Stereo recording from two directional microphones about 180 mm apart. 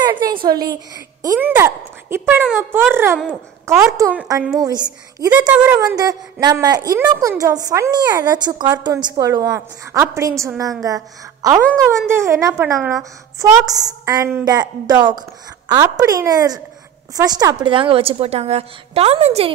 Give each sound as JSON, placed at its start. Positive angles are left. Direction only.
{"t": 0.0, "sound": "a sound", "side_deg": -25}
{"t": 0.5, "sound": "a child's voice", "side_deg": -20}
{"t": 5.5, "sound": "a child's voice", "side_deg": -10}
{"t": 5.8, "sound": "a woman's voice", "side_deg": -20}